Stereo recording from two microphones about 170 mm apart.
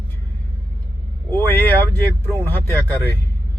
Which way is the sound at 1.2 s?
10° left (ahead or behind).